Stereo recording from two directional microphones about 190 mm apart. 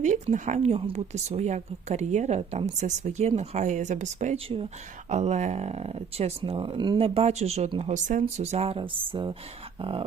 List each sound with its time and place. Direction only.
0.0 s speech: 40° right (ahead or behind)